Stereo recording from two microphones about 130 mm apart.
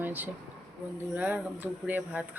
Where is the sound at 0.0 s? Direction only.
15° right (ahead or behind).